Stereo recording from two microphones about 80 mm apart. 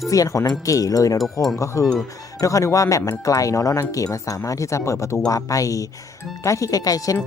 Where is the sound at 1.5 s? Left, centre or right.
Left.